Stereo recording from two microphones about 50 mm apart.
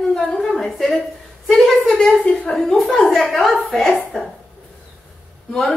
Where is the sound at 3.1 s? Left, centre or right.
Centre.